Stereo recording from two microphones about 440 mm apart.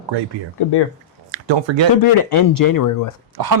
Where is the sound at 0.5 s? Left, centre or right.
Left.